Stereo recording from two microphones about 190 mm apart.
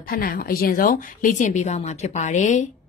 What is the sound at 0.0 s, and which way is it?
A woman's voice, 50° left (ahead or behind).